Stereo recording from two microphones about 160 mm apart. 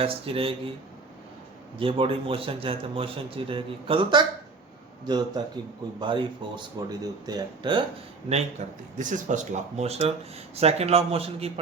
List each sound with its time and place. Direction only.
0.0 s a man's voice: 35° right (ahead or behind)
1.8 s a man's voice: 35° right (ahead or behind)
8.3 s a man's voice: 45° right (ahead or behind)